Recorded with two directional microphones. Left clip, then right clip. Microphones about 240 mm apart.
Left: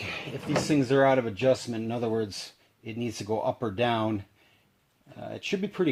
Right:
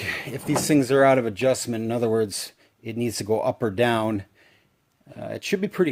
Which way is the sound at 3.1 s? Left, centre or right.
Right.